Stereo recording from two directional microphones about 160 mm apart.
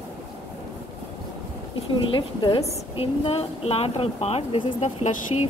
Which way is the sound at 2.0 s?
30° left (ahead or behind).